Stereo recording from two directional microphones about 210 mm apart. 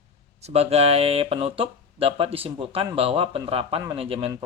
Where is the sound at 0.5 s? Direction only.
30° right (ahead or behind).